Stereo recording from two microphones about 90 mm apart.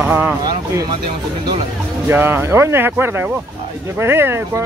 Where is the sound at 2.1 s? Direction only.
25° right (ahead or behind).